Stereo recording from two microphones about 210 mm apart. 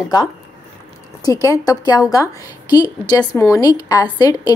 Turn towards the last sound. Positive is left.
turn(degrees=20)  # may be behind; listen again after turning